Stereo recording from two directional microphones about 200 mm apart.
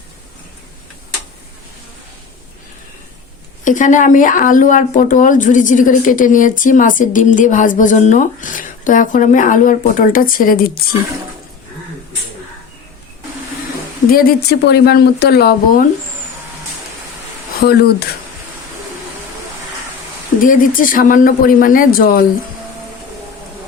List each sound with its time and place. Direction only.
3.6 s speech: 40° left (ahead or behind)
14.1 s speech: 50° left (ahead or behind)
17.6 s speech: 50° left (ahead or behind)
20.4 s speech: 45° left (ahead or behind)